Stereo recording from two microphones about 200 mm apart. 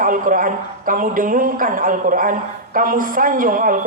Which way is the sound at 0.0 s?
45° right (ahead or behind).